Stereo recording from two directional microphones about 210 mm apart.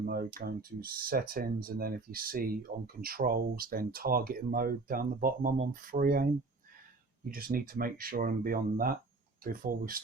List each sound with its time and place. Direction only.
0.0 s speech: 45° right (ahead or behind)